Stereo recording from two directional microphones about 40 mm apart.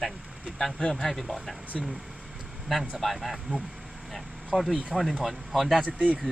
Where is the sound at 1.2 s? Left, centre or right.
Centre.